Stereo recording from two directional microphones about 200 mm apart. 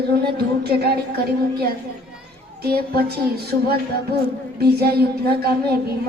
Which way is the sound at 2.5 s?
50° right (ahead or behind).